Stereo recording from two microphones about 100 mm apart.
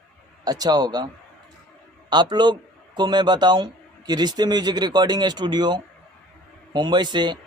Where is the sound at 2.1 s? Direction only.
50° right (ahead or behind).